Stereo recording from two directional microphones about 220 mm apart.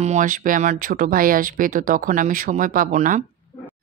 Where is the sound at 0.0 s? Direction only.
35° right (ahead or behind).